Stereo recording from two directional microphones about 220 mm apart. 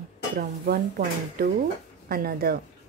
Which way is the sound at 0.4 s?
45° right (ahead or behind).